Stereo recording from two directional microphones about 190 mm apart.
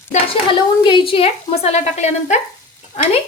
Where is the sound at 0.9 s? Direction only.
30° left (ahead or behind).